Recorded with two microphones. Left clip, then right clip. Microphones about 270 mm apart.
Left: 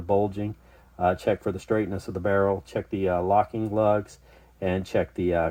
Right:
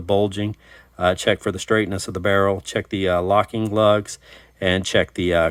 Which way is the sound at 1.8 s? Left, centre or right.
Right.